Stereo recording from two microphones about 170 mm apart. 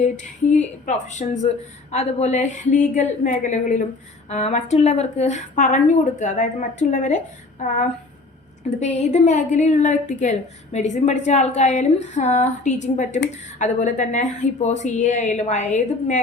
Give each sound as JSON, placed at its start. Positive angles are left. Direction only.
{"t": 0.0, "sound": "a woman's voice", "side_deg": 45}
{"t": 9.0, "sound": "a woman's voice", "side_deg": 40}